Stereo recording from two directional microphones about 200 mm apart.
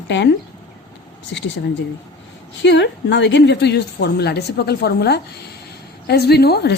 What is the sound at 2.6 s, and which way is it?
A woman's voice, 60° left (ahead or behind).